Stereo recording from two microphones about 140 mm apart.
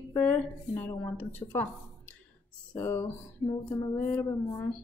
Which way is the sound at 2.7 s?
15° left (ahead or behind).